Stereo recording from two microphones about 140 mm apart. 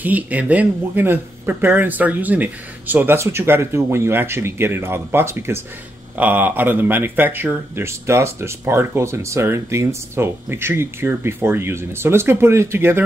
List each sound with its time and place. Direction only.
0.0 s speech: 10° right (ahead or behind)